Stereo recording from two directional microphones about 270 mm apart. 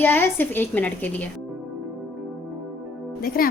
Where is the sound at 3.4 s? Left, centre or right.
Left.